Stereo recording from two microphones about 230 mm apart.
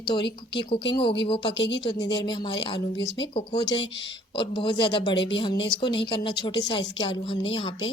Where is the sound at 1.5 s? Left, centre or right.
Left.